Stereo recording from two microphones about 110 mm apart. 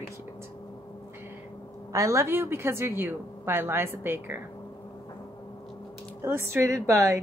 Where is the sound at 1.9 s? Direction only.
25° right (ahead or behind).